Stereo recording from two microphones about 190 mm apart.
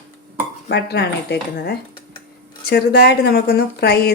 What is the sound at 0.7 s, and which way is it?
A woman's voice, 60° left (ahead or behind).